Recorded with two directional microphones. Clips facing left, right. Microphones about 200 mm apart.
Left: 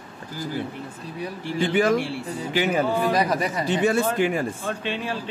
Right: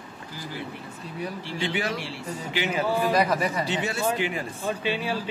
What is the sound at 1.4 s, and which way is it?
A man's voice, 50° left (ahead or behind).